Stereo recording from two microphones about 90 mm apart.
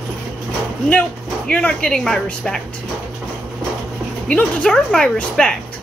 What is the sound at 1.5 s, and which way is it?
A woman's voice, 15° left (ahead or behind).